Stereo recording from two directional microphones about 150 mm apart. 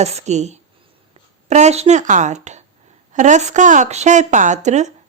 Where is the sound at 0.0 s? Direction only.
45° right (ahead or behind).